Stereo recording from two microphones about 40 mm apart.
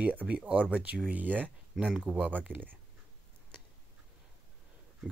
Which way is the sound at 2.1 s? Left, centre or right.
Right.